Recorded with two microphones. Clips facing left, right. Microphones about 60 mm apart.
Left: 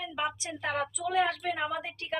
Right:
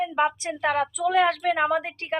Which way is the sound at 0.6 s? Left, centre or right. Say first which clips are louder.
Right 8 dB; right.